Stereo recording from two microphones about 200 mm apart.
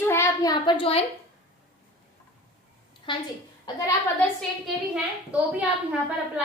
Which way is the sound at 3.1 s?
25° left (ahead or behind).